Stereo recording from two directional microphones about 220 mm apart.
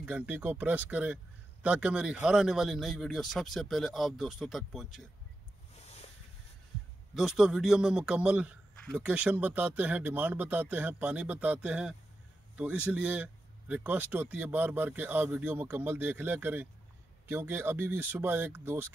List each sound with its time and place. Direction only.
0.0 s speech: 5° right (ahead or behind)
5.8 s a sound: 30° left (ahead or behind)
7.2 s speech: centre (ahead or behind)